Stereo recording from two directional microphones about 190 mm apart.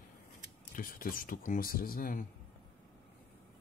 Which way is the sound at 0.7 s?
45° left (ahead or behind).